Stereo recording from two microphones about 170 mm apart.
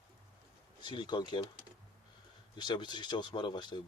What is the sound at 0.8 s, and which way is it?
Speech, 25° left (ahead or behind).